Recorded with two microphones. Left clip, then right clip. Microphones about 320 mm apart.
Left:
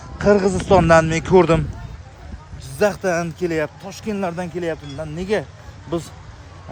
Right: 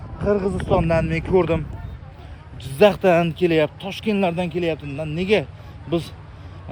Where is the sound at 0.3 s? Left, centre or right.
Left.